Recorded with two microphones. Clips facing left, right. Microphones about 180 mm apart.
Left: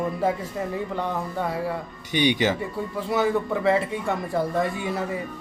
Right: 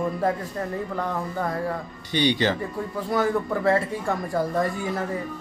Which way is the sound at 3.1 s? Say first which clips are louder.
Left 1 dB; centre (ahead or behind).